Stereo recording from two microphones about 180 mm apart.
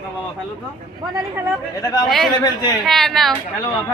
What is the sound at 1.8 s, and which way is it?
Speech, 20° left (ahead or behind).